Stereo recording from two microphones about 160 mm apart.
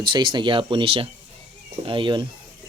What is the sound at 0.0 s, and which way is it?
Speech, 30° right (ahead or behind).